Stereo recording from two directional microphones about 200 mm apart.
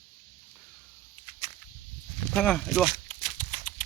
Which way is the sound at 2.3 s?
5° left (ahead or behind).